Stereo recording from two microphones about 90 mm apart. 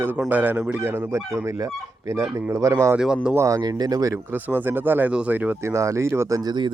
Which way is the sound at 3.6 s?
50° right (ahead or behind).